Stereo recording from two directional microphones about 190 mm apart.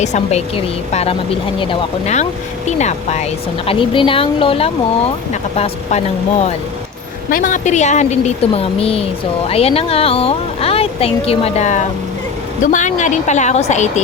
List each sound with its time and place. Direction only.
0.0 s a woman's voice: 35° left (ahead or behind)
7.3 s speech: 45° left (ahead or behind)